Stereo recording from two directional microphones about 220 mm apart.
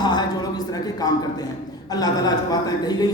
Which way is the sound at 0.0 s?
20° left (ahead or behind).